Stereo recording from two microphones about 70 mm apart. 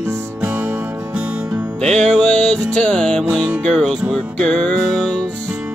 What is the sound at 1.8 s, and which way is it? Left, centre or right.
Music, centre.